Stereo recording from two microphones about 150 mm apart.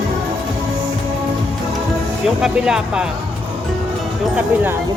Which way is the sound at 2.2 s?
5° right (ahead or behind).